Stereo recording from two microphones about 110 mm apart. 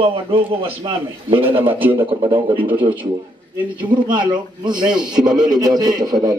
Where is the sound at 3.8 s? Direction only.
45° right (ahead or behind).